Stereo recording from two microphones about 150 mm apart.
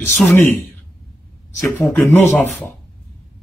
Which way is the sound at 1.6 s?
15° left (ahead or behind).